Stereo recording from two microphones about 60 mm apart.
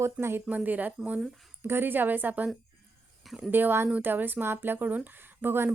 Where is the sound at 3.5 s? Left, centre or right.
Right.